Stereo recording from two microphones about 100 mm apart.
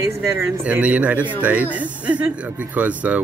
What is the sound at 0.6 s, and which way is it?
Speech, 15° right (ahead or behind).